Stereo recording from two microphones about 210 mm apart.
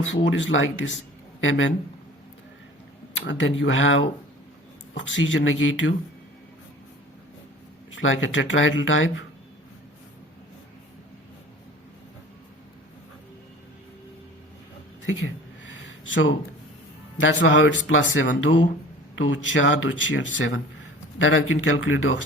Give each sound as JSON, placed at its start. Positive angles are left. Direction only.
{"t": 0.3, "sound": "a man's voice", "side_deg": 60}
{"t": 3.2, "sound": "speech", "side_deg": 60}
{"t": 7.9, "sound": "speech", "side_deg": 65}
{"t": 16.0, "sound": "speech", "side_deg": 65}